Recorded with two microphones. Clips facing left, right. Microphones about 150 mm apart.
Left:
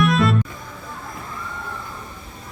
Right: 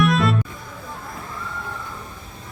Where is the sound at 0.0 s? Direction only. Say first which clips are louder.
Left 1 dB; centre (ahead or behind).